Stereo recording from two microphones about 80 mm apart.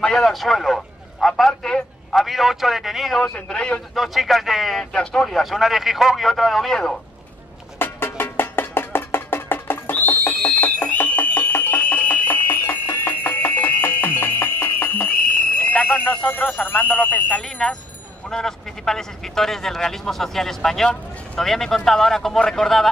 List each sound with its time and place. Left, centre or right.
0.0 s a man's voice: centre
3.2 s a man's voice: centre
3.9 s speech: centre
4.9 s speech: centre
7.8 s music: left
15.5 s speech: centre
17.4 s a man's voice: centre